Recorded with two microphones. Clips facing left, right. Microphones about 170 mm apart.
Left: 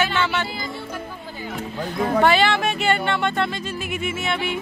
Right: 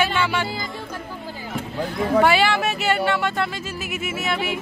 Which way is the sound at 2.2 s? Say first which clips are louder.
Left 2 dB; 10° right (ahead or behind).